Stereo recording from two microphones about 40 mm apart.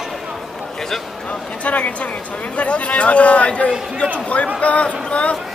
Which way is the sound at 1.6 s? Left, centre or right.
Left.